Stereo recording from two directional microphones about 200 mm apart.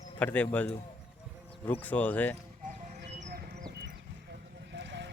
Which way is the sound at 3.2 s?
40° right (ahead or behind).